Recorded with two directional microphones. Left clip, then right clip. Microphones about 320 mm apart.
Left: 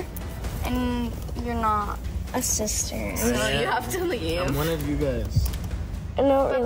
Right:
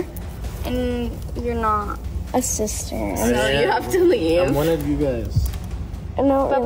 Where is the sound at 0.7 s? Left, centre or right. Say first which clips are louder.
Right 4 dB; centre.